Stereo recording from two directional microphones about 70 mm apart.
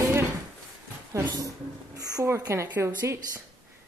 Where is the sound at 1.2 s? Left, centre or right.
Right.